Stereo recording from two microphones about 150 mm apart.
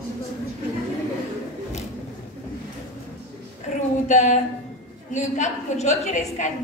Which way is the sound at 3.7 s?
55° left (ahead or behind).